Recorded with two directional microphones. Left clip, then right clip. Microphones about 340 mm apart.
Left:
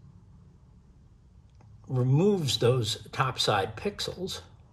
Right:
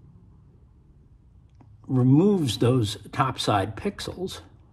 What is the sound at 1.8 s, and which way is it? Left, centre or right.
Speech, right.